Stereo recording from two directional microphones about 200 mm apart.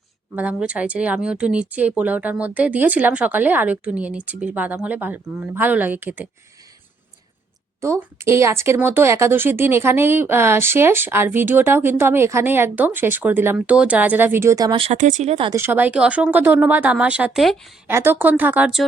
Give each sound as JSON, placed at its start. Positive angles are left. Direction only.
{"t": 0.3, "sound": "speech", "side_deg": -5}
{"t": 7.8, "sound": "speech", "side_deg": -15}
{"t": 14.9, "sound": "speech", "side_deg": -40}
{"t": 15.5, "sound": "speech", "side_deg": -10}
{"t": 17.8, "sound": "speech", "side_deg": -10}